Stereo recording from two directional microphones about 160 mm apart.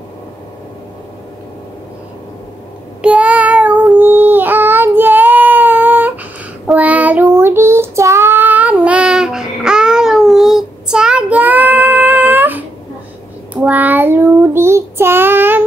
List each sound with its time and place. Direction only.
3.0 s child singing: 10° right (ahead or behind)